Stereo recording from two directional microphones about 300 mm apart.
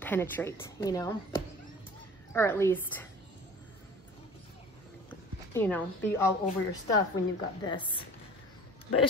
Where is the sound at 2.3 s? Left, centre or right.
Centre.